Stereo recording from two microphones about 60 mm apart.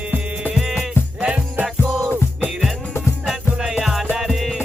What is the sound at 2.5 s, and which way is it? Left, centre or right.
Music, centre.